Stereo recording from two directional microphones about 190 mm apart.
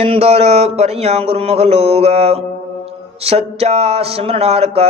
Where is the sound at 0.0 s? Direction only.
30° right (ahead or behind).